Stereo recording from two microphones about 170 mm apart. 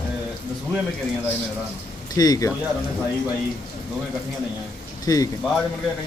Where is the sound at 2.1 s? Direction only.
20° left (ahead or behind).